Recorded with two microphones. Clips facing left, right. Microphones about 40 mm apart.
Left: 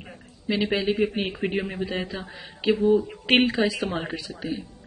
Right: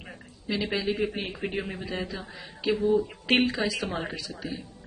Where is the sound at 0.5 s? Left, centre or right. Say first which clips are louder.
Left 4 dB; left.